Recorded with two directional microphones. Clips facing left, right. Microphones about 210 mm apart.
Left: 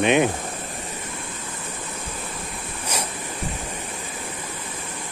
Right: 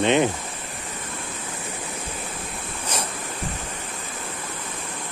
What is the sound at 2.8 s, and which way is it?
Ocean, 10° left (ahead or behind).